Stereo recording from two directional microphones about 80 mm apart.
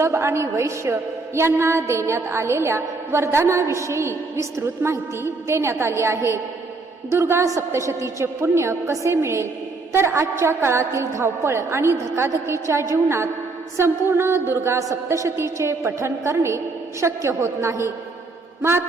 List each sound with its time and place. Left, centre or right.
0.0 s a woman's voice: right